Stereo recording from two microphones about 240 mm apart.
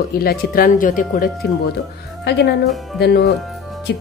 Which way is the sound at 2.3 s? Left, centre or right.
Left.